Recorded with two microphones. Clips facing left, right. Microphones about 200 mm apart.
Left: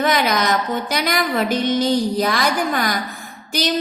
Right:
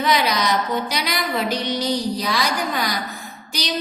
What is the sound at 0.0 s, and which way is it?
A woman's voice, 50° left (ahead or behind).